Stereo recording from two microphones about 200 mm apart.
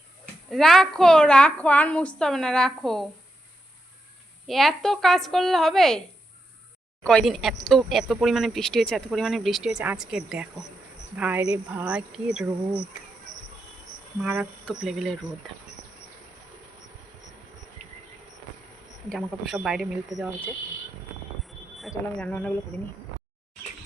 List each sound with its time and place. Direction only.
0.5 s speech: centre (ahead or behind)
4.4 s speech: centre (ahead or behind)
7.0 s speech: 5° left (ahead or behind)
14.2 s speech: 5° right (ahead or behind)
19.0 s speech: centre (ahead or behind)
21.8 s speech: centre (ahead or behind)